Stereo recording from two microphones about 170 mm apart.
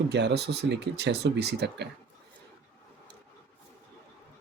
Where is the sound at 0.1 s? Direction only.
85° right.